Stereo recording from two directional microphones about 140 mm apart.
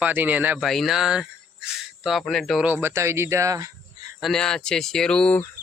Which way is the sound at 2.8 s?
20° right (ahead or behind).